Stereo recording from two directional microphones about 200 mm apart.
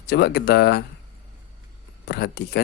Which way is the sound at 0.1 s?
55° left (ahead or behind).